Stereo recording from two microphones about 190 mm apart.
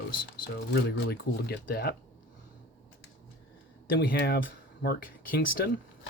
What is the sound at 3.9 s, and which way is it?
Speech, 60° left (ahead or behind).